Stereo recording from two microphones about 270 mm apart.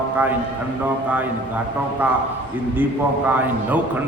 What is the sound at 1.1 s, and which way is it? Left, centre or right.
Speech, centre.